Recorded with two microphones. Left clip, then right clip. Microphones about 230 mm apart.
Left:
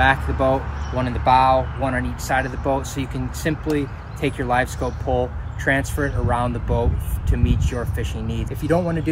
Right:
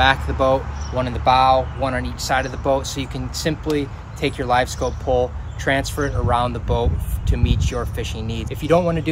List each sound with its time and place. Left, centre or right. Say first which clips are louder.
0.0 s speech: right 1 dB; centre
8.6 s speech: right 4 dB; centre